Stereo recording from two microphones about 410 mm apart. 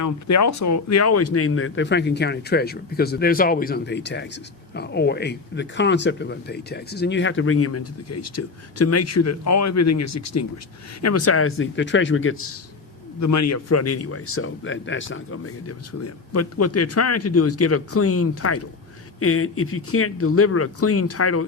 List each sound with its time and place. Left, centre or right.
0.0 s speech: left
13.1 s speech: left